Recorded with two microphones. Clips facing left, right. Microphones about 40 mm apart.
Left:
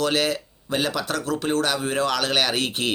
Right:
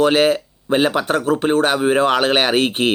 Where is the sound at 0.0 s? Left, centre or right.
Right.